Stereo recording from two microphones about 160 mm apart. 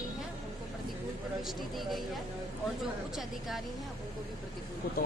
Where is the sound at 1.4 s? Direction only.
Centre (ahead or behind).